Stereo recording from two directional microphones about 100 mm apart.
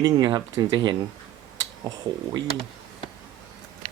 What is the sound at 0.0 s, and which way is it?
Speech, 45° right (ahead or behind).